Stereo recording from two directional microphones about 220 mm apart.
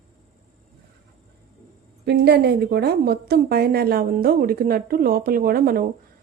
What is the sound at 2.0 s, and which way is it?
A woman's voice, 50° right (ahead or behind).